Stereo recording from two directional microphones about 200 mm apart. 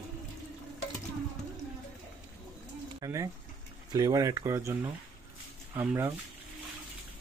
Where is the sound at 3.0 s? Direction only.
15° right (ahead or behind).